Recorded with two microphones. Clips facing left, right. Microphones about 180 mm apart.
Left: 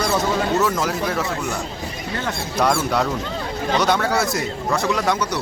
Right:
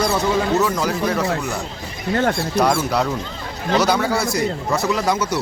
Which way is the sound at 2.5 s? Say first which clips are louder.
Left 1 dB; centre (ahead or behind).